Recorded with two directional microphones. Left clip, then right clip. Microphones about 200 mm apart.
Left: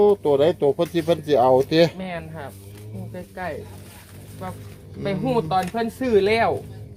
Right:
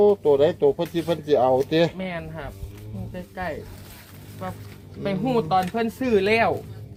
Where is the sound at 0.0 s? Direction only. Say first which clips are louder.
Left 1 dB; 45° left (ahead or behind).